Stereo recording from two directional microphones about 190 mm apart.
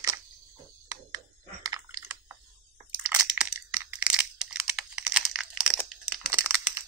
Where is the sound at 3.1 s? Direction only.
5° right (ahead or behind).